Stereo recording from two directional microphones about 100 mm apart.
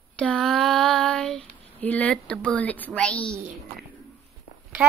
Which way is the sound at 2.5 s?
15° left (ahead or behind).